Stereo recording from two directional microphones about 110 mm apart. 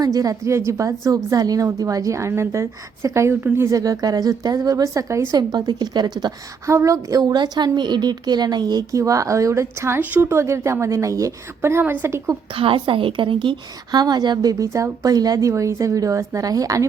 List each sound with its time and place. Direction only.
0.0 s a woman's voice: 35° right (ahead or behind)
6.7 s a woman's voice: 25° right (ahead or behind)
12.5 s a woman's voice: 55° right (ahead or behind); by 16.8 s 30° right (ahead or behind)